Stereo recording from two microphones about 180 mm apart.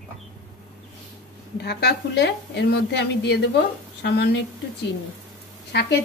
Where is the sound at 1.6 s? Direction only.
65° left (ahead or behind).